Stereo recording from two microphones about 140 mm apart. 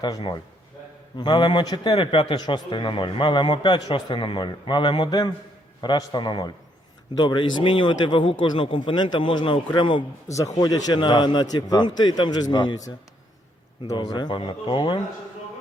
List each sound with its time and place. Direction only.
0.0 s a man's voice: 30° left (ahead or behind)
10.2 s a man's voice: 20° left (ahead or behind)